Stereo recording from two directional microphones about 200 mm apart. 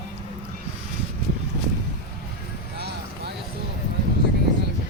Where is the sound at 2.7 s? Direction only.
55° right (ahead or behind).